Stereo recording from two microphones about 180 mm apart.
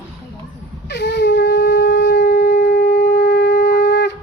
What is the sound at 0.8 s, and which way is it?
Shofar, 70° left (ahead or behind).